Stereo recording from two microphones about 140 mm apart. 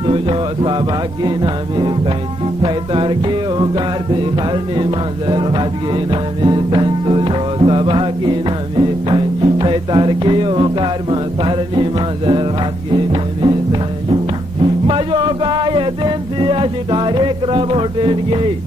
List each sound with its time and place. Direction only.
0.0 s music: 35° right (ahead or behind)